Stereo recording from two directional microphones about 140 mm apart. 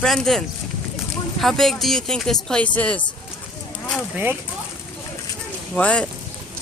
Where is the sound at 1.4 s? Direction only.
Centre (ahead or behind).